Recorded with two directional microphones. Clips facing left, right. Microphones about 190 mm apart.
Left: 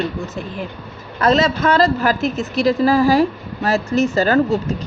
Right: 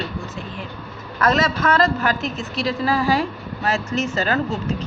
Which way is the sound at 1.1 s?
30° left (ahead or behind).